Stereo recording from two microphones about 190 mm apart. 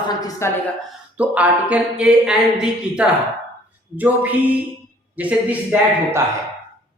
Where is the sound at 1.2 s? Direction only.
5° right (ahead or behind).